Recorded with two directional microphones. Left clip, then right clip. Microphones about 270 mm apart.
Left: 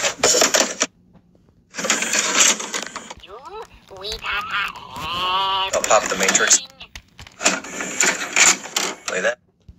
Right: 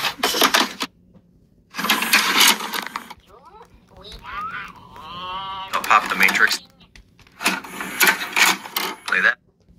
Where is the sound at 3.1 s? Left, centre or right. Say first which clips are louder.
Left 10 dB; left.